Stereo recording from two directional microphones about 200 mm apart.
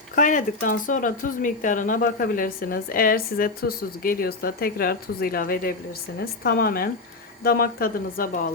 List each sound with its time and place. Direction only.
0.2 s speech: 40° left (ahead or behind)